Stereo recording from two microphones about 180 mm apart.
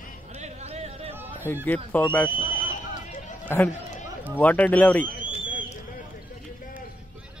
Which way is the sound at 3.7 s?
40° left (ahead or behind).